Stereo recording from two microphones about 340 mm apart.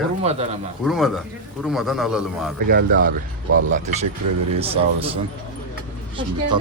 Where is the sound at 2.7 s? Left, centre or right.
Right.